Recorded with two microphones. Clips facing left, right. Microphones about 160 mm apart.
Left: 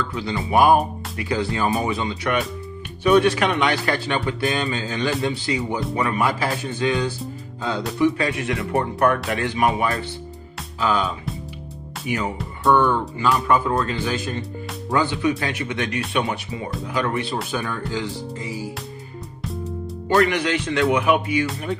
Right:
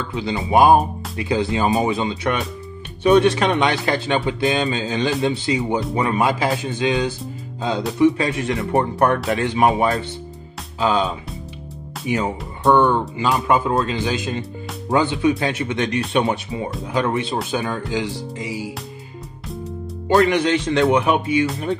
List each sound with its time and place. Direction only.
0.1 s speech: 20° right (ahead or behind)
12.1 s speech: 25° right (ahead or behind)
20.2 s speech: 25° right (ahead or behind)